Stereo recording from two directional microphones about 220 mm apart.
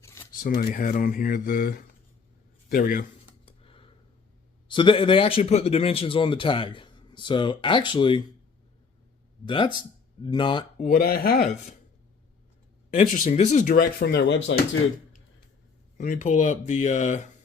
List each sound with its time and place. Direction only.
0.0 s a sound: 15° left (ahead or behind)
0.3 s a man's voice: 40° left (ahead or behind)
3.4 s a sound: 25° left (ahead or behind)
4.7 s a man's voice: 20° left (ahead or behind)
9.5 s a man's voice: 20° left (ahead or behind)
10.8 s speech: 40° left (ahead or behind)
12.9 s speech: 35° left (ahead or behind); by 14.5 s 55° left (ahead or behind)
16.0 s speech: 35° left (ahead or behind)